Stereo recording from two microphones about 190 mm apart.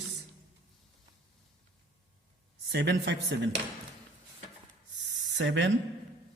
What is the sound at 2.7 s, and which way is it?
Speech, 65° right (ahead or behind).